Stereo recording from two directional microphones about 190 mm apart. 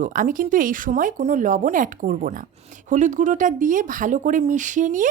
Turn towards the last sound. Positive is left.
turn(degrees=-45)  # may be behind; listen again after turning